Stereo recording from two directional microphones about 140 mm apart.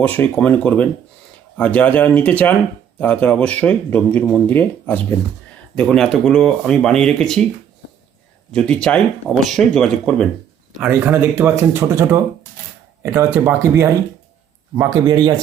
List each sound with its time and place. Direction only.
0.0 s speech: 10° left (ahead or behind)
8.5 s speech: 5° left (ahead or behind)
10.8 s speech: 15° right (ahead or behind)